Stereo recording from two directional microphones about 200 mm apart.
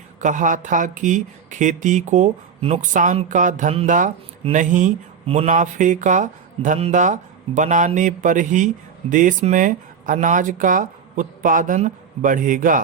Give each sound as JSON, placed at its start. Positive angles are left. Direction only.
{"t": 0.2, "sound": "speech", "side_deg": -40}